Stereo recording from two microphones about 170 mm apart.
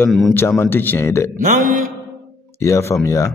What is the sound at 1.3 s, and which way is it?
Mantra, 50° right (ahead or behind).